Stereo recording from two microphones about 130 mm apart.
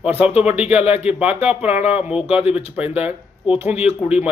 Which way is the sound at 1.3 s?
15° right (ahead or behind).